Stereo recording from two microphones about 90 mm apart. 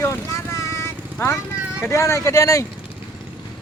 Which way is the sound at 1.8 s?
35° left (ahead or behind).